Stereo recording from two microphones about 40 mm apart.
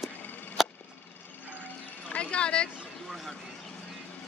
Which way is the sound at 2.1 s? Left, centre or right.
Left.